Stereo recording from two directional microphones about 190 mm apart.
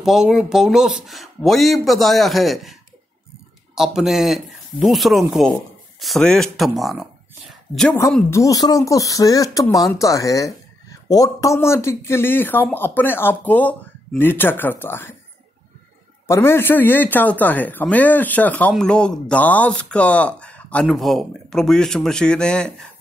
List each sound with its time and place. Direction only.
0.0 s speech: centre (ahead or behind)
8.3 s speech: 15° left (ahead or behind)
16.3 s speech: 10° left (ahead or behind)